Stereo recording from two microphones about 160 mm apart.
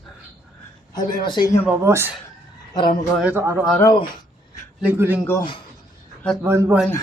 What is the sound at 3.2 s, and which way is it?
Speech, 10° right (ahead or behind).